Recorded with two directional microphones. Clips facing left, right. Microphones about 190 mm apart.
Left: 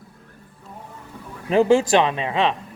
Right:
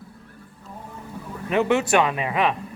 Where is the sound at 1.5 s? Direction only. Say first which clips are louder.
Left 4 dB; 30° left (ahead or behind).